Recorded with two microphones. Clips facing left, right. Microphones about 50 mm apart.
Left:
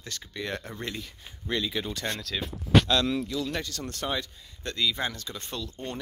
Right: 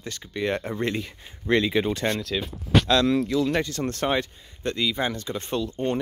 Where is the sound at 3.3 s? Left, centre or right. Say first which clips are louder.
Right 8 dB; right.